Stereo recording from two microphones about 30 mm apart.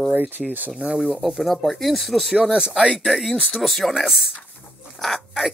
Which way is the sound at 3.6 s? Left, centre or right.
Centre.